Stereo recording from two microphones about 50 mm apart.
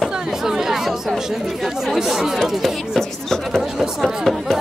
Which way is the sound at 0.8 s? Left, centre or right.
Centre.